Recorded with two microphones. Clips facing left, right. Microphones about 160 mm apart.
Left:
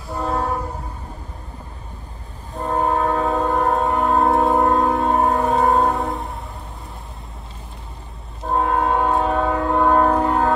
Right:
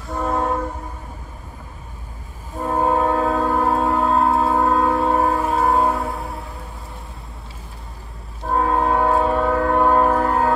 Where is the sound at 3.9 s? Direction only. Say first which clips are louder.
Left 1 dB; 20° left (ahead or behind).